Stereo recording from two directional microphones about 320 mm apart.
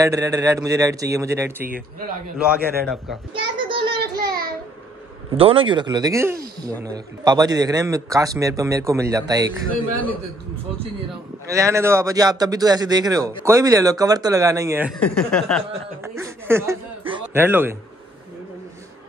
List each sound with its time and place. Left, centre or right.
0.0 s a man's voice: centre
3.5 s child singing: centre
3.9 s child singing: right
5.4 s a man's voice: centre
11.4 s a man's voice: centre
16.0 s speech: centre